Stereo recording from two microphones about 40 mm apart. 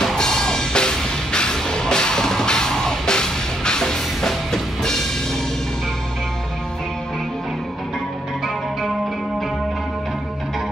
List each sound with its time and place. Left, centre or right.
0.0 s music: centre